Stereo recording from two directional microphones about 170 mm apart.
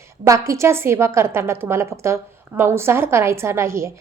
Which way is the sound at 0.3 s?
20° right (ahead or behind).